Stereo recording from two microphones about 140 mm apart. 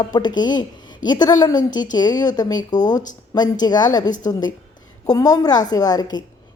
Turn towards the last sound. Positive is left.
turn(degrees=30)  # may be behind; listen again after turning